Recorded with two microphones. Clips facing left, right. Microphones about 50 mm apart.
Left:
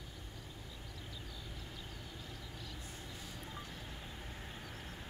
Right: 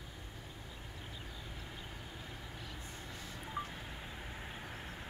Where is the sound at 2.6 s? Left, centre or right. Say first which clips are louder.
Right 1 dB; right.